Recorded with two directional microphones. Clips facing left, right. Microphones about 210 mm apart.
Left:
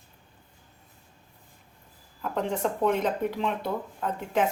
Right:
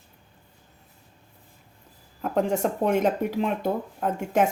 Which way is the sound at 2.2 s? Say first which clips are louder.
Right 4 dB; 45° right (ahead or behind).